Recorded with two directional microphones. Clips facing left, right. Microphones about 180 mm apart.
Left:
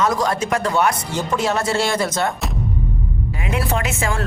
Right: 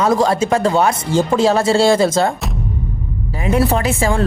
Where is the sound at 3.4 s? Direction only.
35° right (ahead or behind).